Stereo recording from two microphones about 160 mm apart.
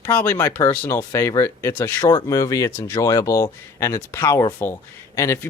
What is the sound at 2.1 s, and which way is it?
Speech, 25° left (ahead or behind).